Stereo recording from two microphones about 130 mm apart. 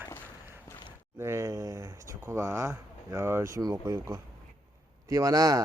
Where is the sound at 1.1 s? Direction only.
20° right (ahead or behind).